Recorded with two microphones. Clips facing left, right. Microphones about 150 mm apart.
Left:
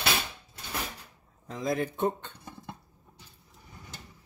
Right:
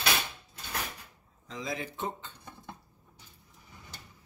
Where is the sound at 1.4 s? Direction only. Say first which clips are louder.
Left 7 dB; 50° left (ahead or behind).